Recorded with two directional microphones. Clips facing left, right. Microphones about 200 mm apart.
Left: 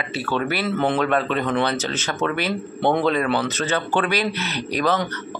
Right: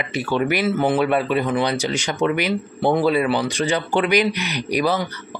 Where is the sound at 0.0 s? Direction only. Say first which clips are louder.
Right 3 dB; 15° right (ahead or behind).